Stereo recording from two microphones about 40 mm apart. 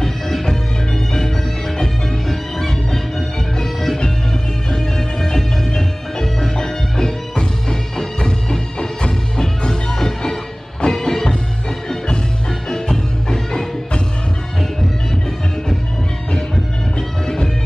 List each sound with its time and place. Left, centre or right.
0.0 s music: centre
12.6 s music: centre